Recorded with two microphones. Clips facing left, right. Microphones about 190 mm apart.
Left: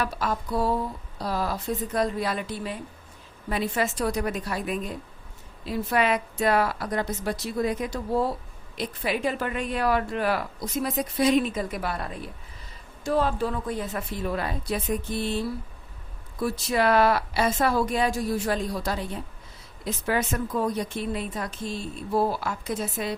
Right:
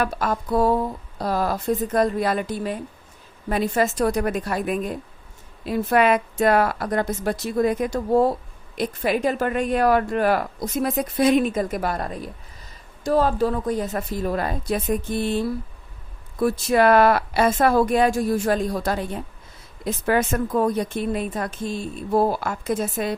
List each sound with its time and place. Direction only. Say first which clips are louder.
0.0 s a woman's voice: right 4 dB; 50° right (ahead or behind)